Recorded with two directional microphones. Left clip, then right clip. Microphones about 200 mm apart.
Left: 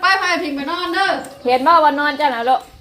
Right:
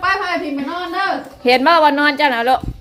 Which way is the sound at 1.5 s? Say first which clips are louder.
Right 1 dB; 40° right (ahead or behind).